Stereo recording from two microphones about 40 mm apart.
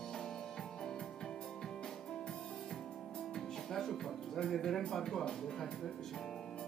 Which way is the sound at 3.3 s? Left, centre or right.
Centre.